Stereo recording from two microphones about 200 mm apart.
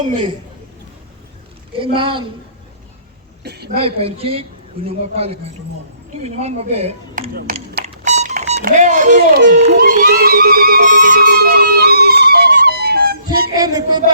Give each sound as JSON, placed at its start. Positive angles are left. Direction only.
{"t": 1.8, "sound": "speech", "side_deg": -25}
{"t": 3.4, "sound": "a woman's voice", "side_deg": -55}
{"t": 3.8, "sound": "speech", "side_deg": -30}
{"t": 8.0, "sound": "music", "side_deg": -35}
{"t": 8.6, "sound": "speech", "side_deg": -40}
{"t": 9.4, "sound": "music", "side_deg": -60}
{"t": 13.2, "sound": "a sound", "side_deg": -20}